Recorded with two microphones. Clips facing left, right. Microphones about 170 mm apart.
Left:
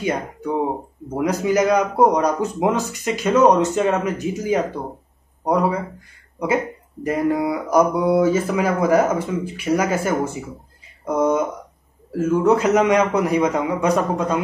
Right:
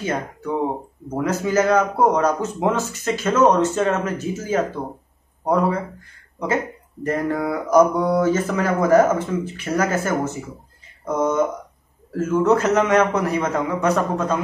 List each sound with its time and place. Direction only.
1.1 s speech: 15° left (ahead or behind)